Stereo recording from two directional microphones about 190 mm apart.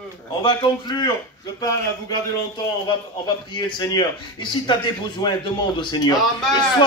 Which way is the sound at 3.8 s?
20° left (ahead or behind).